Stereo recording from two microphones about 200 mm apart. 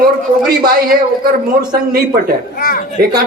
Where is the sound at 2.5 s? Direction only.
45° left (ahead or behind).